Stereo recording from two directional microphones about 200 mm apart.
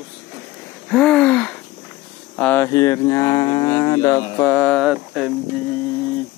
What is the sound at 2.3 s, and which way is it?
Speech, 10° left (ahead or behind).